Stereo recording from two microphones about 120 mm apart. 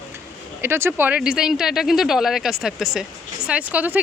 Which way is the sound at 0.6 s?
20° right (ahead or behind).